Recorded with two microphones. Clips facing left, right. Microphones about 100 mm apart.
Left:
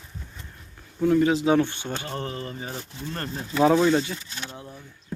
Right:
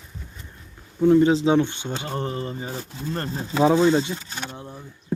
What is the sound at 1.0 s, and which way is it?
Speech, 25° right (ahead or behind).